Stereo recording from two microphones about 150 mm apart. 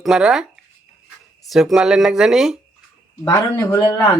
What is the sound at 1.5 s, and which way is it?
Speech, centre (ahead or behind).